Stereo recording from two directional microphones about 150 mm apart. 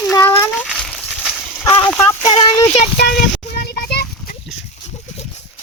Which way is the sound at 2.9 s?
90° left.